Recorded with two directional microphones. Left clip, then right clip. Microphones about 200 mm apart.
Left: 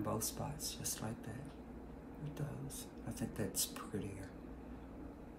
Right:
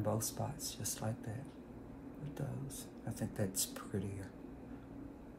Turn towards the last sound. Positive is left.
turn(degrees=-25)  # may be behind; listen again after turning